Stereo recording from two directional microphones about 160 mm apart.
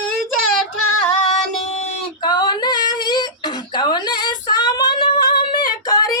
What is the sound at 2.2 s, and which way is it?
Female singing, 25° left (ahead or behind).